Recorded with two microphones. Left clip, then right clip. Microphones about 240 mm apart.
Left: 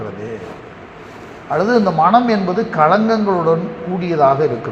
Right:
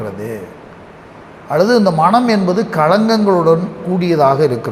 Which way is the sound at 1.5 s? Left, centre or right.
Right.